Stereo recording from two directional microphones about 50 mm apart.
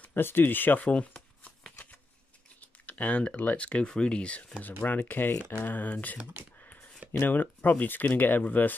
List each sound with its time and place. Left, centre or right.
0.1 s speech: left
0.8 s shuffling cards: left
2.6 s computer keyboard: left
3.3 s speech: left
6.6 s a sound: left
7.2 s speech: left